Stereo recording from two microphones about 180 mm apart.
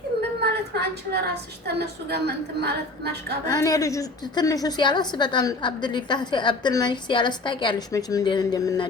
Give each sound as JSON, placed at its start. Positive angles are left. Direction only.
{"t": 0.4, "sound": "a woman's voice", "side_deg": -65}
{"t": 3.4, "sound": "a woman's voice", "side_deg": 20}